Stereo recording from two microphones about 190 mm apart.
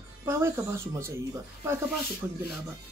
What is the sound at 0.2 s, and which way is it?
Speech, 15° right (ahead or behind).